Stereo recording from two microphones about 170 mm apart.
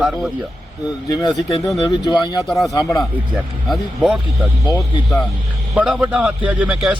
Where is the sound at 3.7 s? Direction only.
Centre (ahead or behind).